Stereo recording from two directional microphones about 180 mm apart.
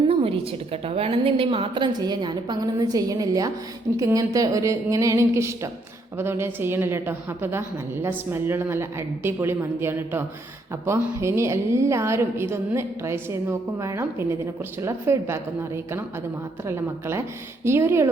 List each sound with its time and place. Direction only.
0.0 s a woman's voice: 30° right (ahead or behind); by 18.1 s 15° right (ahead or behind)